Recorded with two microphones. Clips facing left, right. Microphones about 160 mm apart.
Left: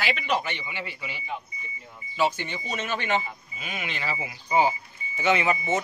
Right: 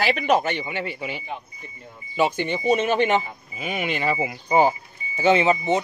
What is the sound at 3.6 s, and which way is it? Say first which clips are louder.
Speech: right 8 dB; 55° right (ahead or behind).